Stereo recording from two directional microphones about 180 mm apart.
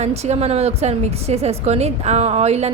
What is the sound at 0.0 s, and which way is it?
A woman's voice, 35° right (ahead or behind).